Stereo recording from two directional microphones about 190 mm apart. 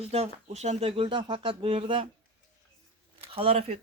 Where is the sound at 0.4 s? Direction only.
35° right (ahead or behind).